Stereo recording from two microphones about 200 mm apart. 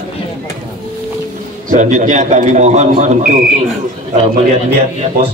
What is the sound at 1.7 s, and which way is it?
Speech, 40° right (ahead or behind).